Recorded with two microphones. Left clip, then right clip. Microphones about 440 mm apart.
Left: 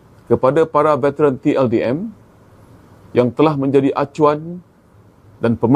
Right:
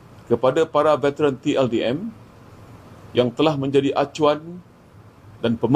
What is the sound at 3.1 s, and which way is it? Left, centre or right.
Speech, left.